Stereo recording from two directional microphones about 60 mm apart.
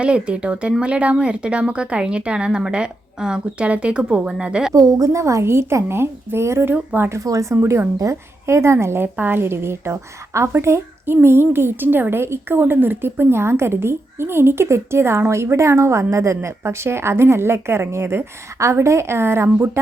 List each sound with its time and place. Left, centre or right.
0.0 s speech: centre
4.7 s a woman's voice: right
6.9 s speech: right
7.5 s a woman's voice: right
9.1 s a woman's voice: right